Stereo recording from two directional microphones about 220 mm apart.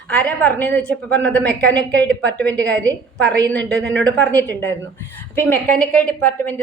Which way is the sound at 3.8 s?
55° right (ahead or behind).